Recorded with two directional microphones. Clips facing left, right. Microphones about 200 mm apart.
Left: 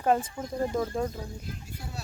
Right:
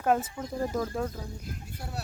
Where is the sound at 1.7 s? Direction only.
65° right (ahead or behind).